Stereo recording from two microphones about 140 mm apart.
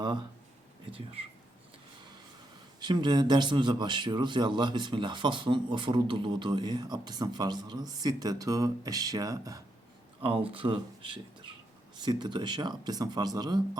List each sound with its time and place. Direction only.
0.9 s speech: 40° right (ahead or behind)
2.8 s speech: 30° right (ahead or behind)
10.2 s speech: 40° right (ahead or behind)